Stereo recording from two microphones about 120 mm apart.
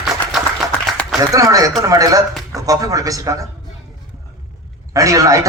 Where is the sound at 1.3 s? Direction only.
30° right (ahead or behind).